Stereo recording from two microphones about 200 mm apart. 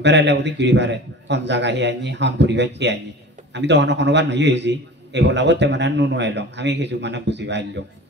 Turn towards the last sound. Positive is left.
turn(degrees=-60)  # may be behind; listen again after turning